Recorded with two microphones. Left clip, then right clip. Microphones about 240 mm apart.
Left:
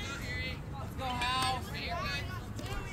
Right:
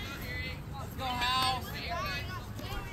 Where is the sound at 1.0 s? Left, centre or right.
Right.